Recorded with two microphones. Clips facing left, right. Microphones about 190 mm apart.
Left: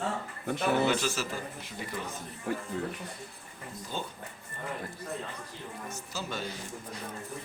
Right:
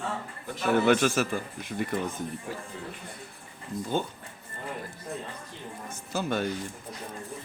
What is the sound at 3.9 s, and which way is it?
Speech, 50° right (ahead or behind).